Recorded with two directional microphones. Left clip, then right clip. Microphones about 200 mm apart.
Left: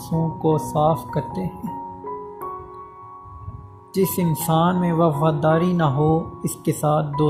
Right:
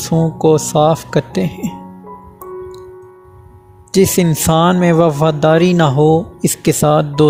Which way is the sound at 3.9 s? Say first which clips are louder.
Right 10 dB; 55° right (ahead or behind).